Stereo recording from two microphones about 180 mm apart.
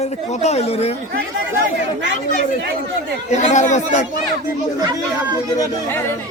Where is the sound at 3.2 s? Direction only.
40° left (ahead or behind).